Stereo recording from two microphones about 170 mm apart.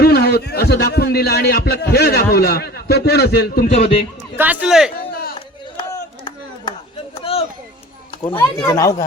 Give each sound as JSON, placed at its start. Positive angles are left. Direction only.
{"t": 0.0, "sound": "a man's voice", "side_deg": 70}
{"t": 4.4, "sound": "speech", "side_deg": -5}
{"t": 4.9, "sound": "a sound", "side_deg": 60}
{"t": 5.9, "sound": "chop", "side_deg": 25}
{"t": 7.2, "sound": "a sound", "side_deg": 30}
{"t": 8.2, "sound": "speech", "side_deg": 15}